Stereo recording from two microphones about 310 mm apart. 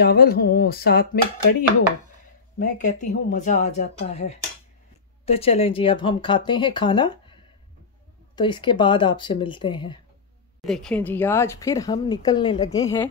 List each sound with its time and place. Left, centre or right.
0.0 s a woman's voice: left
2.6 s a woman's voice: left
8.4 s speech: centre
10.6 s speech: centre